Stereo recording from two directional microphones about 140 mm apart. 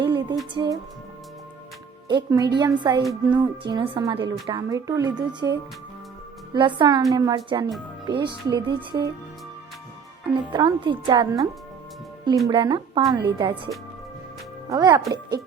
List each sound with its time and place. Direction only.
0.5 s speech: 30° right (ahead or behind)
2.0 s speech: 30° right (ahead or behind)
3.0 s speech: centre (ahead or behind)
3.3 s a woman's voice: 30° right (ahead or behind)
10.3 s speech: 30° right (ahead or behind)
12.5 s speech: 35° right (ahead or behind)
14.7 s a woman's voice: 30° right (ahead or behind)